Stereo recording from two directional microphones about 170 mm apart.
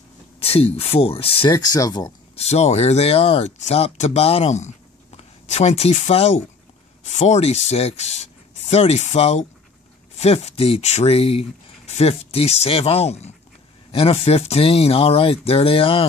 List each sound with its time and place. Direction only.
0.4 s speech: 35° left (ahead or behind)
1.5 s speech: 20° left (ahead or behind)
2.3 s speech: 40° left (ahead or behind)